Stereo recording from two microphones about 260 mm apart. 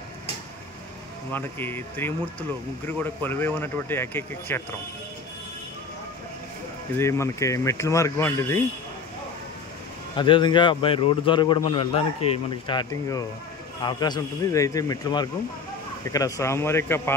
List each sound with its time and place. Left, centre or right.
1.3 s speech: centre
7.0 s speech: centre
10.1 s a man's voice: centre